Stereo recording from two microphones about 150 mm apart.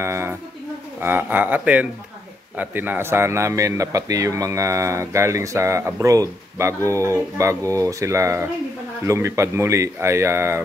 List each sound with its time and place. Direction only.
0.0 s speech: 15° right (ahead or behind)